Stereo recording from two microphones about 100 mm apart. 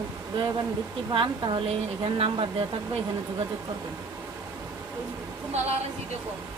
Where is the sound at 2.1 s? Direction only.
70° right (ahead or behind).